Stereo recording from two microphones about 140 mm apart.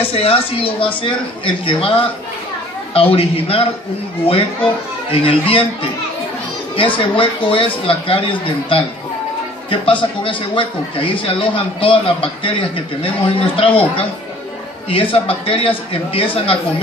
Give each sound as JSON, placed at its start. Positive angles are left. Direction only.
{"t": 0.1, "sound": "a man's voice", "side_deg": 45}
{"t": 5.2, "sound": "speech", "side_deg": 40}
{"t": 6.8, "sound": "speech", "side_deg": 40}